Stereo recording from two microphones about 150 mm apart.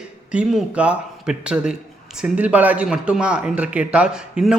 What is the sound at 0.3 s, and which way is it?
Speech, 10° right (ahead or behind).